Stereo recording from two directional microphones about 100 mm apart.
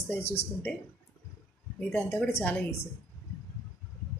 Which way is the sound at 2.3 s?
25° left (ahead or behind).